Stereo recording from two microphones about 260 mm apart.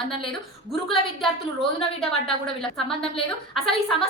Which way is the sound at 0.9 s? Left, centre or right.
Centre.